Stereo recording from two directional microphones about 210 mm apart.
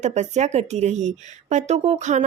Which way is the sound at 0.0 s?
35° right (ahead or behind).